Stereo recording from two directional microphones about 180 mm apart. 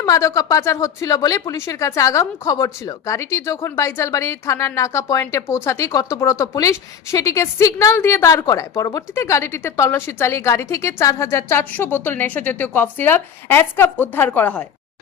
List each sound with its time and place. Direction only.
0.0 s a woman's voice: 15° left (ahead or behind)